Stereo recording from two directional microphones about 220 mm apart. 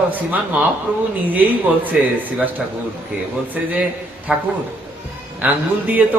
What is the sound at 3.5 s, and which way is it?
A man's voice, 5° right (ahead or behind).